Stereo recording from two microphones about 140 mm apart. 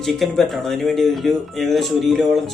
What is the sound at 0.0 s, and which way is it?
Speech, centre (ahead or behind).